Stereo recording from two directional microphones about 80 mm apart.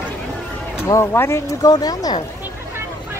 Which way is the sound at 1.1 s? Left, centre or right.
Left.